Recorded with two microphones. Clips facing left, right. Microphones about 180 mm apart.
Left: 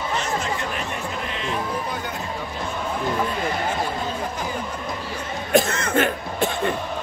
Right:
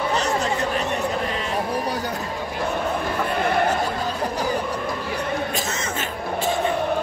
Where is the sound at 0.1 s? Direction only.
40° right (ahead or behind).